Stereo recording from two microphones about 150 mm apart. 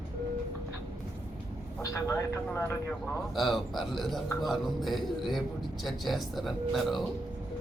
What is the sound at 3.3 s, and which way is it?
Speech, centre (ahead or behind).